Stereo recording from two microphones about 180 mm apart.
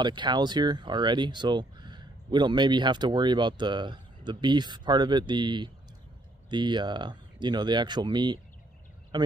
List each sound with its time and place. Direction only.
0.0 s speech: 25° right (ahead or behind)